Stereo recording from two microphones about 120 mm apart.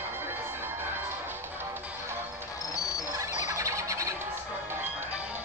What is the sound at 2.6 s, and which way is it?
Music, 30° left (ahead or behind).